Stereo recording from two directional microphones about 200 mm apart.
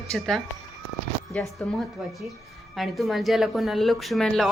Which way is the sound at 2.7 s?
Centre (ahead or behind).